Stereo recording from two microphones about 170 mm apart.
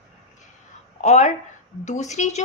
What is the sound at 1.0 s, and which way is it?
A woman's voice, 45° left (ahead or behind).